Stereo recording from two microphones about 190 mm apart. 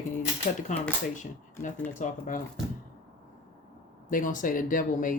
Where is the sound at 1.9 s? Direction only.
40° left (ahead or behind).